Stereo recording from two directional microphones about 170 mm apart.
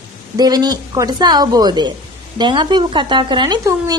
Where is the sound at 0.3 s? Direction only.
25° right (ahead or behind).